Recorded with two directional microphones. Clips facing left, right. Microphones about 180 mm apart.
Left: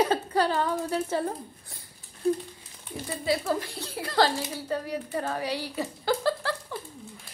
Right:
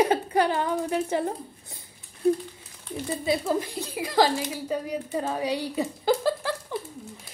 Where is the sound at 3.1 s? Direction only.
20° right (ahead or behind).